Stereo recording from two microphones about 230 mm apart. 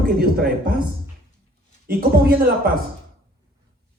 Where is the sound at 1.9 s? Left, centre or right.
Right.